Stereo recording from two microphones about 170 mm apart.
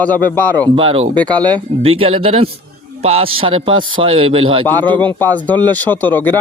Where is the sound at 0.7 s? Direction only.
35° right (ahead or behind).